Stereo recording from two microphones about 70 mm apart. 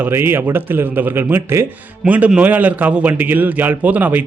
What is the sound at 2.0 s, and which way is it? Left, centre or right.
A man's voice, right.